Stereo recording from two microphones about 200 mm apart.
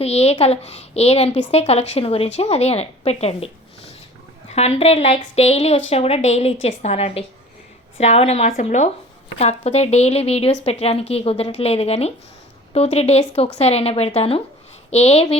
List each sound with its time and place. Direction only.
0.0 s a woman's voice: 30° left (ahead or behind)